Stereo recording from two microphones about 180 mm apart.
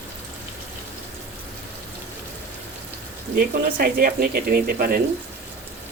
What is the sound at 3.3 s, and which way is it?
Speech, 55° right (ahead or behind).